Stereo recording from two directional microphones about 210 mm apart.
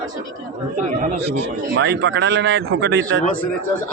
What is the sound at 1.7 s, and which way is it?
A man's voice, 60° right (ahead or behind).